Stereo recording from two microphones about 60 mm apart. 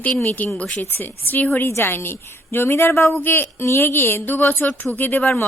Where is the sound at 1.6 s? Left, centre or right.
Left.